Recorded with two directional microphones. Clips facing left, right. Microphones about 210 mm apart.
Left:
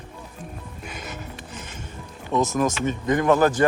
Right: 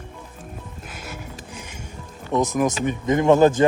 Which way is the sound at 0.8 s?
5° right (ahead or behind).